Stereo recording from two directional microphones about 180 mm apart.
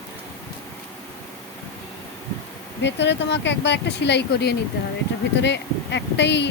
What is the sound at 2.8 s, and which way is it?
Speech, 75° left (ahead or behind).